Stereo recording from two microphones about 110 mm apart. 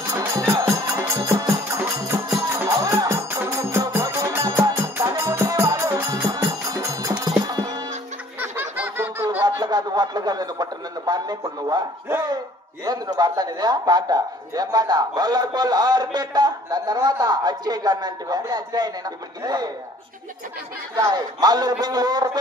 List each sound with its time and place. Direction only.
0.3 s music: 35° right (ahead or behind)
5.8 s music: 20° right (ahead or behind)
6.1 s music: 30° right (ahead or behind)
8.4 s a sound: 15° right (ahead or behind)
9.4 s a sound: 40° right (ahead or behind)
12.8 s speech: 35° right (ahead or behind)
20.9 s speech: 35° right (ahead or behind)